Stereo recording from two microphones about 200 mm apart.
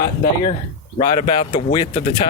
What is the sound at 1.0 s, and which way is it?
Speech, 25° left (ahead or behind).